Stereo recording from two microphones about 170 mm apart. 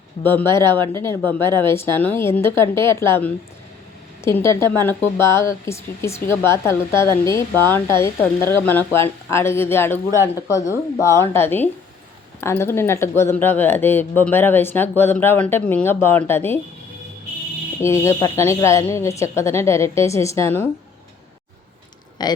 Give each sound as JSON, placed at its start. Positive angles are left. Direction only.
{"t": 0.2, "sound": "speech", "side_deg": 10}
{"t": 17.7, "sound": "speech", "side_deg": 15}
{"t": 22.2, "sound": "speech", "side_deg": 25}